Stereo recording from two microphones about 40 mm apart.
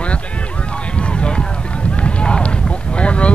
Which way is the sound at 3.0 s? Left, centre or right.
Left.